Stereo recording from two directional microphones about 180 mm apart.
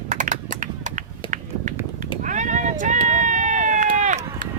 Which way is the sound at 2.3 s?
45° right (ahead or behind).